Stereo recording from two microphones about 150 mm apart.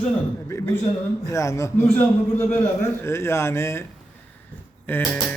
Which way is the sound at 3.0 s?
15° left (ahead or behind).